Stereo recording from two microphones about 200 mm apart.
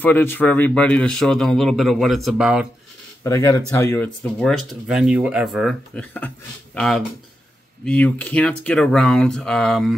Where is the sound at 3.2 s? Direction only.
15° left (ahead or behind).